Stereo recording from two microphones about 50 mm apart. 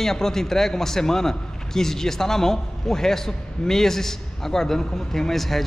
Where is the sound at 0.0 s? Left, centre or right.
Centre.